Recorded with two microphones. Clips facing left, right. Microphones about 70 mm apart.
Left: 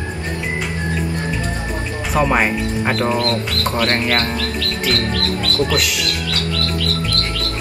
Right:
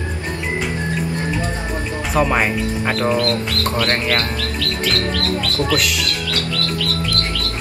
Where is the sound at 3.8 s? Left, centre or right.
Left.